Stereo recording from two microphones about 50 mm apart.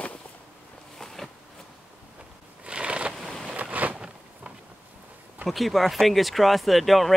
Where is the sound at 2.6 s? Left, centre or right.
Right.